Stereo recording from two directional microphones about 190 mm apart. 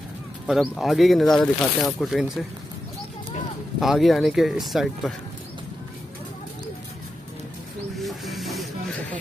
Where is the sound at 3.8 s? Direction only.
Centre (ahead or behind).